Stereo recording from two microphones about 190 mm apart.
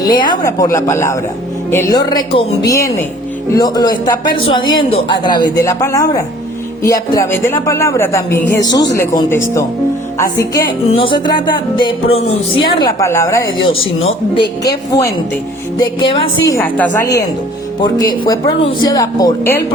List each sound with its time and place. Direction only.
0.0 s speech: 20° left (ahead or behind)
10.8 s speech: 30° left (ahead or behind)
13.0 s speech: 15° left (ahead or behind)
14.0 s speech: 30° left (ahead or behind)
14.6 s speech: 20° left (ahead or behind)
16.5 s speech: 10° left (ahead or behind)
18.6 s speech: 20° left (ahead or behind)